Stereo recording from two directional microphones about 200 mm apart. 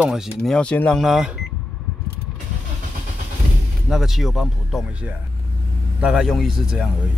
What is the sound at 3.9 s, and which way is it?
Speech, centre (ahead or behind).